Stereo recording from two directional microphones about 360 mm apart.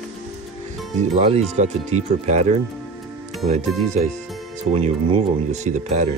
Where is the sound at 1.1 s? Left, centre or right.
Centre.